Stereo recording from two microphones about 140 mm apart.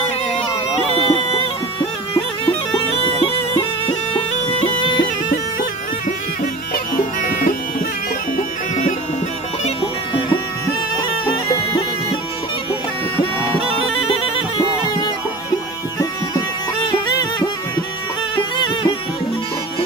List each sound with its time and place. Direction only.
0.9 s music: 45° left (ahead or behind)
4.1 s bagpipes: 40° left (ahead or behind)
5.3 s music: 85° left
8.4 s music: 65° left (ahead or behind)
16.0 s music: 30° left (ahead or behind)